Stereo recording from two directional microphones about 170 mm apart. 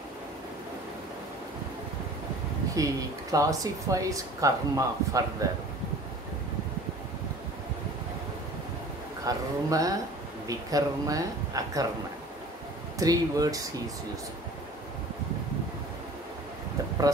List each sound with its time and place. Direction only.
2.7 s speech: 20° right (ahead or behind)
9.2 s speech: 20° right (ahead or behind)
13.0 s speech: 20° right (ahead or behind)